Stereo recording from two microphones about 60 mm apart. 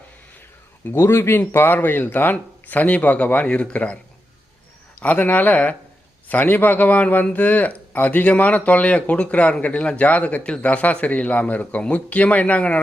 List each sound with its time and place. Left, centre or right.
0.9 s a man's voice: left